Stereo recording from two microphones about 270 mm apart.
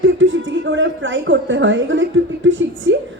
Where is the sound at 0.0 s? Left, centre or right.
Right.